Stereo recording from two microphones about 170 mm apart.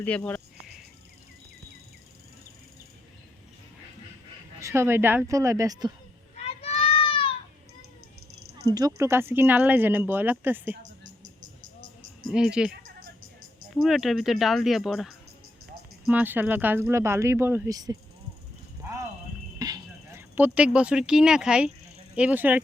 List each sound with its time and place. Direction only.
0.0 s speech: 10° left (ahead or behind)
4.6 s speech: 15° right (ahead or behind)
6.3 s children playing: 40° left (ahead or behind)
8.7 s speech: 20° right (ahead or behind)
12.3 s speech: 5° right (ahead or behind)
13.8 s speech: centre (ahead or behind); by 17.9 s 20° right (ahead or behind)
19.5 s a sound: 20° right (ahead or behind); by 21.7 s 5° right (ahead or behind)
22.1 s speech: 10° right (ahead or behind)